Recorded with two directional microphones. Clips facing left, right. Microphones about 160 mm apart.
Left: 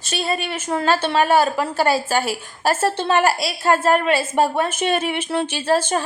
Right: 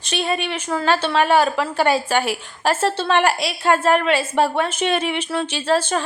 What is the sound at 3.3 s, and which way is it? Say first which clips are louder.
Speech: even; 40° left (ahead or behind).